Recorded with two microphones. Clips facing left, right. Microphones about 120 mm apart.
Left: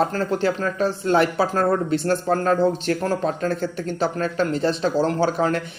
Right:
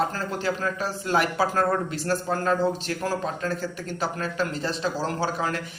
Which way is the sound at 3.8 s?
30° left (ahead or behind).